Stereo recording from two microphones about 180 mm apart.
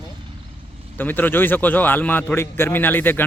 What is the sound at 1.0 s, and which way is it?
A man's voice, 10° left (ahead or behind).